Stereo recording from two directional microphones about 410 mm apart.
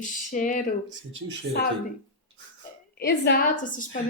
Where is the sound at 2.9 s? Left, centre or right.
Left.